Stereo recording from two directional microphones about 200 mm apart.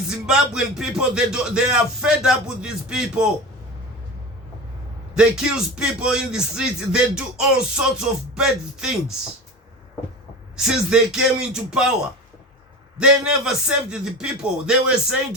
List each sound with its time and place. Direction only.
0.1 s speech: 5° right (ahead or behind)
5.8 s speech: 5° right (ahead or behind)
10.6 s speech: 5° right (ahead or behind)
13.0 s speech: 5° right (ahead or behind)